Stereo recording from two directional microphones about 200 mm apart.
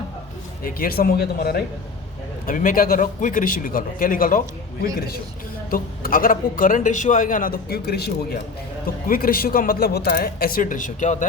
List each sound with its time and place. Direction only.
0.6 s a man's voice: 45° left (ahead or behind)